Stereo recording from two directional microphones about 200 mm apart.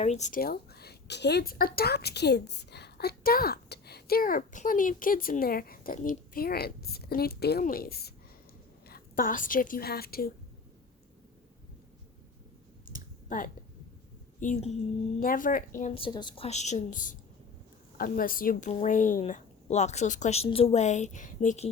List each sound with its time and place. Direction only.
0.0 s a woman's voice: 35° left (ahead or behind); by 10.2 s 50° left (ahead or behind)
13.2 s a woman's voice: 40° left (ahead or behind)
16.0 s a woman's voice: 25° left (ahead or behind)
16.5 s a woman's voice: 35° left (ahead or behind)